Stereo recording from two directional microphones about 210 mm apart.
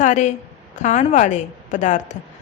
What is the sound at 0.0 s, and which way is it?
A woman's voice, 35° left (ahead or behind).